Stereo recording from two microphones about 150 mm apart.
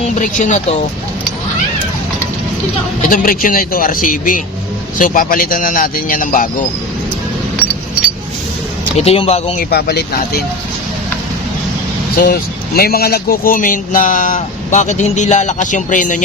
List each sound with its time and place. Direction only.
0.0 s speech: 55° left (ahead or behind)
3.1 s a man's voice: 70° left (ahead or behind)
9.0 s speech: 40° left (ahead or behind)
9.6 s speech: 90° left
12.1 s a man's voice: 90° left; by 16.2 s 60° left (ahead or behind)